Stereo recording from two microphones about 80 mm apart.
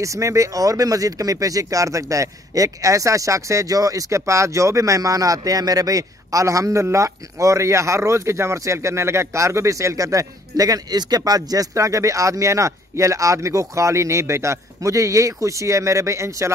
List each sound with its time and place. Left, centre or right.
0.0 s speech: right